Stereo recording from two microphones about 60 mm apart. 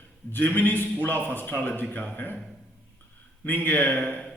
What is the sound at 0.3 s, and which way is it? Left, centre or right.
A man's voice, left.